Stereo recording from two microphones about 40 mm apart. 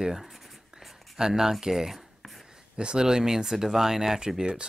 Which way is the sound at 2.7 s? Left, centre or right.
Right.